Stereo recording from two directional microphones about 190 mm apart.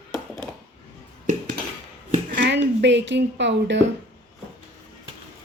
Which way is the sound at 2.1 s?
45° right (ahead or behind).